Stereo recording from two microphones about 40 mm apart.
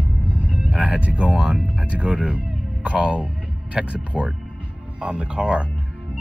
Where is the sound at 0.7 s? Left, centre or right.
Right.